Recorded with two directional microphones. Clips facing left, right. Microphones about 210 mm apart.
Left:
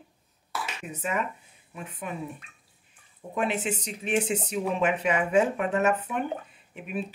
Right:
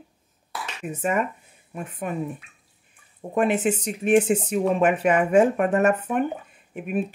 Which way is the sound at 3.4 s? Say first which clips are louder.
Right 7 dB; 50° right (ahead or behind).